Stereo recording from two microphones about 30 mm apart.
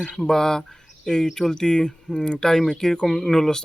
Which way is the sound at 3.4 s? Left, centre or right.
Left.